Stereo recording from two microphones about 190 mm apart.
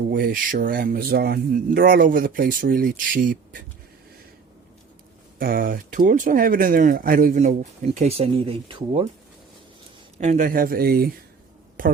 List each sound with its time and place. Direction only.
0.1 s speech: 45° right (ahead or behind)
5.4 s speech: 50° right (ahead or behind); by 9.0 s 30° right (ahead or behind)
10.2 s speech: 40° right (ahead or behind)